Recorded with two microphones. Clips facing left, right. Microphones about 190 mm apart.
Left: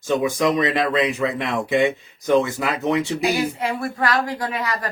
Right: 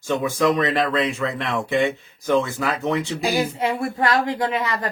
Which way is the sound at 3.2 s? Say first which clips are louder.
Even; 25° right (ahead or behind).